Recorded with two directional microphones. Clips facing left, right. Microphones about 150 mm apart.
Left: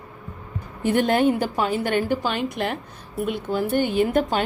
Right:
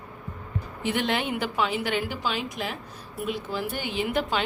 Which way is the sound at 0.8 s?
45° left (ahead or behind).